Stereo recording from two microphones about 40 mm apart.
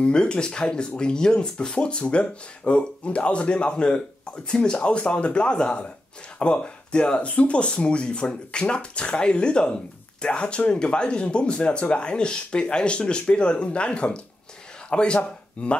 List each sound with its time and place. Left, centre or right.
0.0 s speech: left